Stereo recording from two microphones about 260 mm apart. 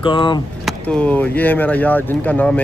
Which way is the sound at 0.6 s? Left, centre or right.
Centre.